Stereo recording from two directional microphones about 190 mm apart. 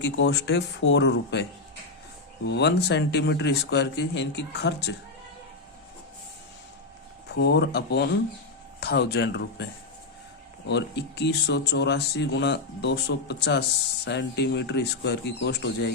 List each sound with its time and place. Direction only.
0.0 s speech: 65° left (ahead or behind)
2.5 s speech: 65° left (ahead or behind)
7.3 s speech: 65° left (ahead or behind)
10.7 s speech: 65° left (ahead or behind)